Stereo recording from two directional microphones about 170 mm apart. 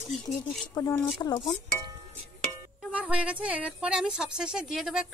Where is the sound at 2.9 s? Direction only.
5° right (ahead or behind).